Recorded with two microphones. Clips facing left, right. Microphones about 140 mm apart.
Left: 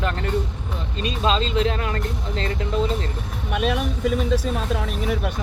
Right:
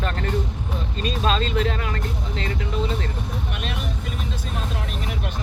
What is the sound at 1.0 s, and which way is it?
Speech, 20° left (ahead or behind).